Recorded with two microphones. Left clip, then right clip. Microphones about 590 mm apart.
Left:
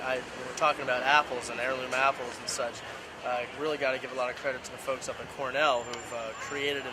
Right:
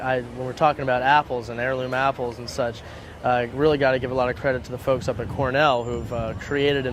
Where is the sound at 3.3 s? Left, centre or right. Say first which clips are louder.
Right 11 dB; right.